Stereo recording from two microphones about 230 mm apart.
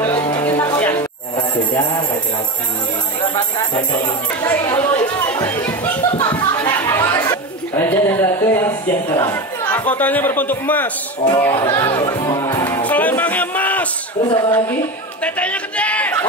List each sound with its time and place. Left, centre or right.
0.4 s music: centre
3.2 s speech: centre
4.5 s chatter: centre
11.6 s music: centre
14.2 s speech: left
15.2 s a sound: centre